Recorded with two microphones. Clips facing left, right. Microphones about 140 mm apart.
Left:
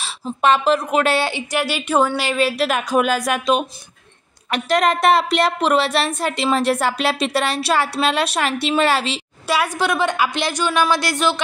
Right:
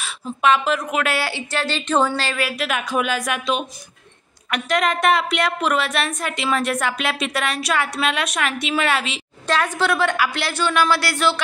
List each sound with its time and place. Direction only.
0.0 s a woman's voice: 35° left (ahead or behind); by 2.4 s 15° left (ahead or behind)
2.4 s a woman's voice: 35° left (ahead or behind)
9.5 s a woman's voice: 10° left (ahead or behind)